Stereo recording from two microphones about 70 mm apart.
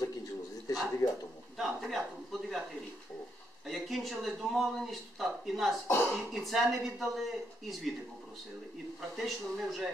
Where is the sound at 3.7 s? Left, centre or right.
Centre.